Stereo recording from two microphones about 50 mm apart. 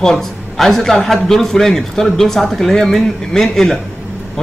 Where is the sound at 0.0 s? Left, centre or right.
Centre.